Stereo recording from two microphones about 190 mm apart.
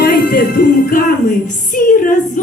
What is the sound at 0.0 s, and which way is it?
Music, 50° left (ahead or behind).